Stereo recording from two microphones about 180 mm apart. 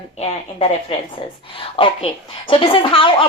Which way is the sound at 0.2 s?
35° left (ahead or behind).